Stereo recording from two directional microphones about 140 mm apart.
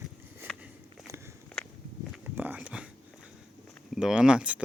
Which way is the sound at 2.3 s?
10° right (ahead or behind).